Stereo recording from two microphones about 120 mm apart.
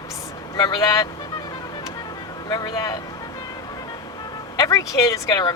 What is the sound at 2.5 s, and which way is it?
Speech, 35° left (ahead or behind).